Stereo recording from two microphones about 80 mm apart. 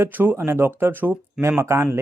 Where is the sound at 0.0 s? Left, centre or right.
Right.